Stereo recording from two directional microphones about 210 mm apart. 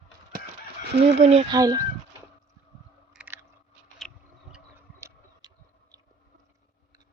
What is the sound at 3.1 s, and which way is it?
Chewing, 5° right (ahead or behind).